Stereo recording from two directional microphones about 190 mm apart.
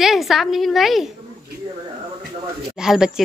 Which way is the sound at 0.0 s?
Centre (ahead or behind).